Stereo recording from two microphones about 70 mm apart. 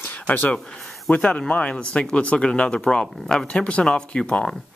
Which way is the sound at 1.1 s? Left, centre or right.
Centre.